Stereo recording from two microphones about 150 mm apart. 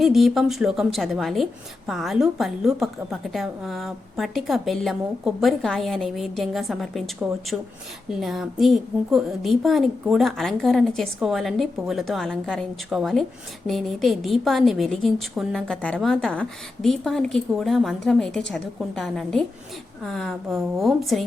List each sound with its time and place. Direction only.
0.0 s a woman's voice: centre (ahead or behind)